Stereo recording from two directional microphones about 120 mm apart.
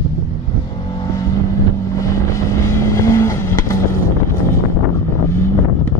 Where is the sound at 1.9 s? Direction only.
25° left (ahead or behind).